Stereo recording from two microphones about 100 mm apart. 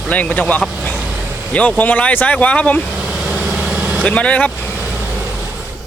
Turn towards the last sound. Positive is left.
turn(degrees=-15)  # may be behind; listen again after turning